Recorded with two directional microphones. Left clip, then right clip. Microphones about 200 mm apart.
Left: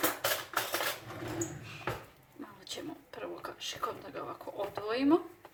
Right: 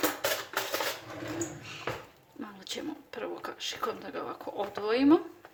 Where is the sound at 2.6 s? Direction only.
45° right (ahead or behind).